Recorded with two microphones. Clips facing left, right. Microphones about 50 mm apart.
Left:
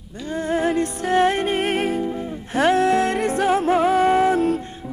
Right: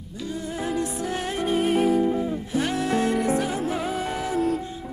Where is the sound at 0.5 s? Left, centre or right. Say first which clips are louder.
Left 7 dB; left.